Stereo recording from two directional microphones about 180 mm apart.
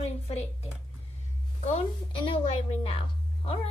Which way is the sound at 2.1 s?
30° left (ahead or behind).